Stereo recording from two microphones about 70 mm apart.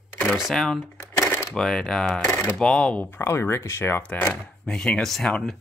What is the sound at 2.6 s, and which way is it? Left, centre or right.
Speech, centre.